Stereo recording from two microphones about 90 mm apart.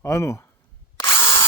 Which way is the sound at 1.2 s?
30° left (ahead or behind).